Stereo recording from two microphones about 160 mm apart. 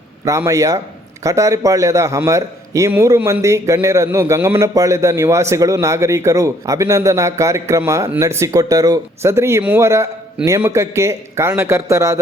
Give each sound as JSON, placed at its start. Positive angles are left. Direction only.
{"t": 0.3, "sound": "a man's voice", "side_deg": -20}